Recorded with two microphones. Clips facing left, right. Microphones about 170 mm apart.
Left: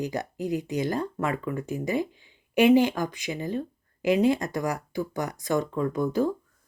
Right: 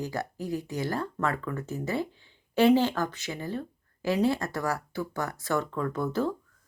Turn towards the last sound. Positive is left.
turn(degrees=15)  # may be behind; listen again after turning